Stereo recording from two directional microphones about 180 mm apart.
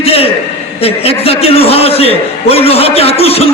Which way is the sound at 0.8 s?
35° left (ahead or behind).